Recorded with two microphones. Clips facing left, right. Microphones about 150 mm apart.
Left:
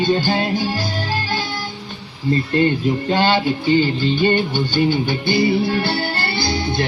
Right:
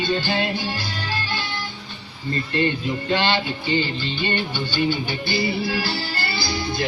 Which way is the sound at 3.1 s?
45° left (ahead or behind).